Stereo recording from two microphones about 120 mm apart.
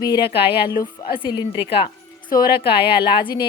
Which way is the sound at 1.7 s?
45° left (ahead or behind).